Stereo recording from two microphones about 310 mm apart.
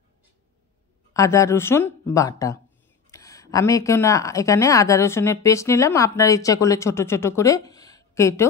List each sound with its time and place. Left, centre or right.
1.1 s speech: centre